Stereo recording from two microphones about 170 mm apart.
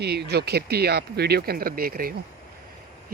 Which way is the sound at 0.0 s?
75° right (ahead or behind).